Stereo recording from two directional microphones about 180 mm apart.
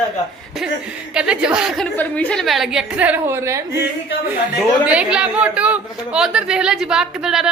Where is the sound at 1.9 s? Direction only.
5° left (ahead or behind); by 3.6 s 15° right (ahead or behind).